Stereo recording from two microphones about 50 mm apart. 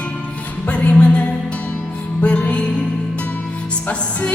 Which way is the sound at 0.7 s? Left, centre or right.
Left.